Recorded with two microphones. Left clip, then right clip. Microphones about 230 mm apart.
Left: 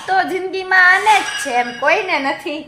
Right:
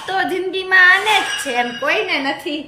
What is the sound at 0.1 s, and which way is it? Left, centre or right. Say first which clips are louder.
A woman's voice: left 2 dB; left.